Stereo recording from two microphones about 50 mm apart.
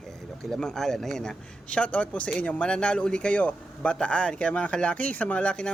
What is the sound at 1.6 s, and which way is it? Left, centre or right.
Speech, left.